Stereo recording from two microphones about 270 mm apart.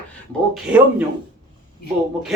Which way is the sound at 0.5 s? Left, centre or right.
Centre.